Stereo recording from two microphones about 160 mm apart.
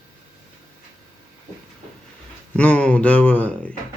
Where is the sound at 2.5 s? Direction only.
5° left (ahead or behind).